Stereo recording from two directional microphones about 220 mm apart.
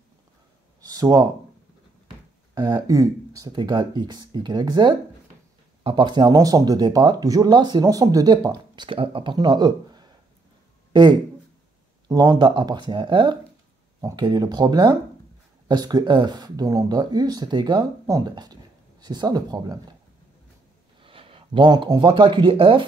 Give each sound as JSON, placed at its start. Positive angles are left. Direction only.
{"t": 0.7, "sound": "a sound", "side_deg": -15}
{"t": 2.5, "sound": "speech", "side_deg": -15}
{"t": 21.0, "sound": "speech", "side_deg": -25}